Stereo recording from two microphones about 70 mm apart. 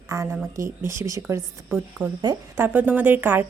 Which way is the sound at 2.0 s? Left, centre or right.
Right.